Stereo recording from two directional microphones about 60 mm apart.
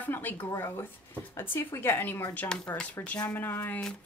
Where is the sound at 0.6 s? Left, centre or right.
Left.